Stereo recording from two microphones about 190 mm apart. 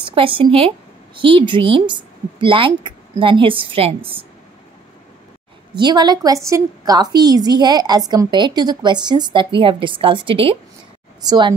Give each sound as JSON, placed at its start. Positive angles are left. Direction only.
{"t": 0.0, "sound": "a woman's voice", "side_deg": -30}
{"t": 5.8, "sound": "a woman's voice", "side_deg": -20}